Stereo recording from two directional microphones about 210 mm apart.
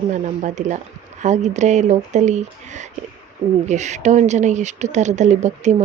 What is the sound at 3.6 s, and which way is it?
A woman's voice, 35° right (ahead or behind).